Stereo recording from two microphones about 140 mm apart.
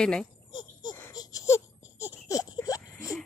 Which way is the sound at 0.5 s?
30° left (ahead or behind).